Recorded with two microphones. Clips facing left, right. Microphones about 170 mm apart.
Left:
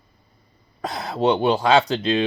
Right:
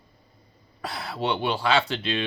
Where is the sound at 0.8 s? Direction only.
40° left (ahead or behind).